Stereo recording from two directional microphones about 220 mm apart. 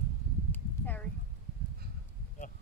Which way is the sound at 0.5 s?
10° left (ahead or behind).